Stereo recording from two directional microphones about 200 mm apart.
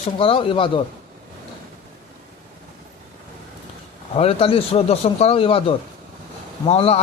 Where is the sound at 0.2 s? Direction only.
25° left (ahead or behind).